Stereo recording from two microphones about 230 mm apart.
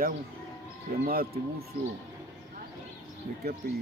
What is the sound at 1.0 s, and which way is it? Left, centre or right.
Speech, right.